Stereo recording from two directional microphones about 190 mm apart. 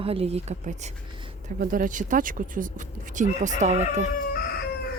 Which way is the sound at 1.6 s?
45° right (ahead or behind).